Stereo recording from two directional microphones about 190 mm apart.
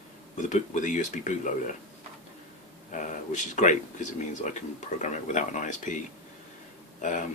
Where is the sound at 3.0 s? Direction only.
40° left (ahead or behind).